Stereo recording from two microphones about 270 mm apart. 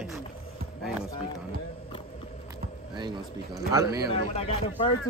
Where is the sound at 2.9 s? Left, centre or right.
Centre.